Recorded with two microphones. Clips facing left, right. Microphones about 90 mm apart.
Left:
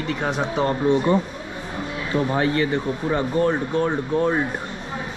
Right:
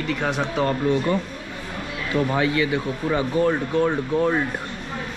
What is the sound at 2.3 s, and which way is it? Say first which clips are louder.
Speech: left 2 dB; 45° left (ahead or behind).